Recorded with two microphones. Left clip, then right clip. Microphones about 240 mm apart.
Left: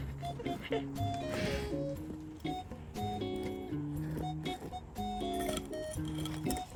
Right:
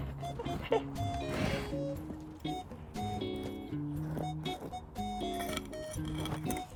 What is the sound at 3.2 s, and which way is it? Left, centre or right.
Music, centre.